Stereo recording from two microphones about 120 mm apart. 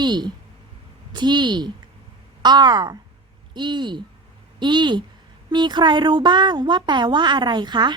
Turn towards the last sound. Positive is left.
turn(degrees=-40)  # may be behind; listen again after turning